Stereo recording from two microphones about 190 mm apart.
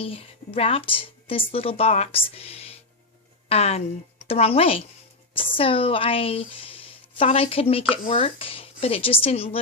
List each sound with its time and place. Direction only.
0.0 s a woman's voice: 30° left (ahead or behind)